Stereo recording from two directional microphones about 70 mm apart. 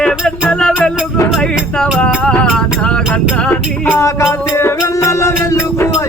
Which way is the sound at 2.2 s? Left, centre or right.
Centre.